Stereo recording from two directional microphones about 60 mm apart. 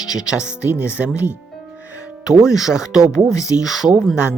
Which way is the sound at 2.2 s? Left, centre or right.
Centre.